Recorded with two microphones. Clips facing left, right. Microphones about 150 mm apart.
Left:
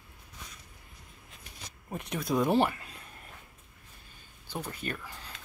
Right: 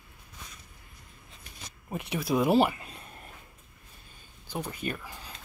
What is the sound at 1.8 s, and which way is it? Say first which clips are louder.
Speech: right 2 dB; 5° right (ahead or behind).